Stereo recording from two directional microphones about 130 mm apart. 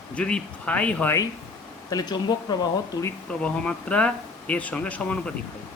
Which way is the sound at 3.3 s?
10° left (ahead or behind).